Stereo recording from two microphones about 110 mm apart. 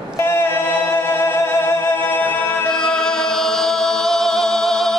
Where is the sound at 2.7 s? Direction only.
5° left (ahead or behind).